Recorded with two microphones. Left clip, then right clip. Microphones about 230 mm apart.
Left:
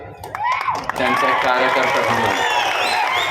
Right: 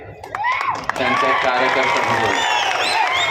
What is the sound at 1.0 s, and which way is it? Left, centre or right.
Speech, left.